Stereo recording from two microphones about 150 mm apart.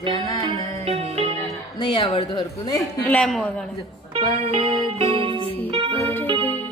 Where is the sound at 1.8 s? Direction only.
30° left (ahead or behind).